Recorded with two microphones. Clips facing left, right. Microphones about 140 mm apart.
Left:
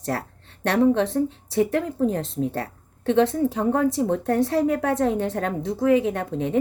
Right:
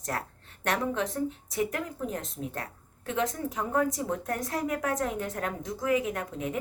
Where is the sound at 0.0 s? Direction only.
30° left (ahead or behind).